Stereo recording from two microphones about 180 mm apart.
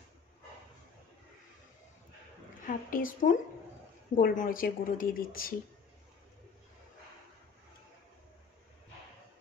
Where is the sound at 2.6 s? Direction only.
50° left (ahead or behind).